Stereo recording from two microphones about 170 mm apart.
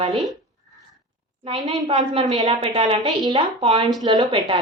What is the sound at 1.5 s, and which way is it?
A woman's voice, 25° right (ahead or behind).